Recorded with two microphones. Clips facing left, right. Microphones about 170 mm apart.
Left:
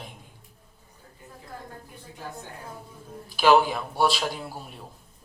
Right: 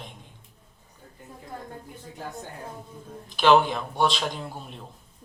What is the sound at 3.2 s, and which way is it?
Speech, 5° left (ahead or behind).